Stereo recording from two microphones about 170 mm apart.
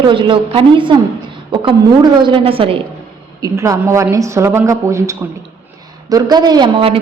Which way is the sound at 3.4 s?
20° right (ahead or behind).